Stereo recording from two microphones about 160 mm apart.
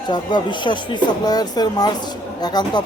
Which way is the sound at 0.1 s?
30° left (ahead or behind).